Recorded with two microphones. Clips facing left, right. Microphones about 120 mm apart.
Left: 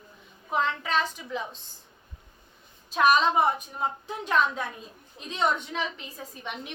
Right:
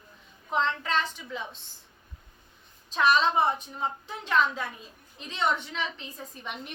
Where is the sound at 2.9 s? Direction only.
15° left (ahead or behind).